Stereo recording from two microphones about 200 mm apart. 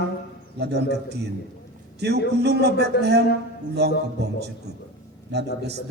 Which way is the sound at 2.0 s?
55° right (ahead or behind).